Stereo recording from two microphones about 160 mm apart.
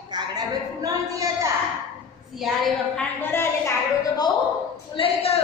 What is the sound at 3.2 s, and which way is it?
Speech, 15° left (ahead or behind).